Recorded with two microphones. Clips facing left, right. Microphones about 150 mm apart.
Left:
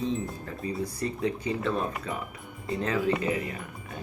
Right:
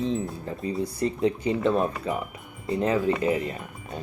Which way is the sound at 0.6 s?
30° right (ahead or behind).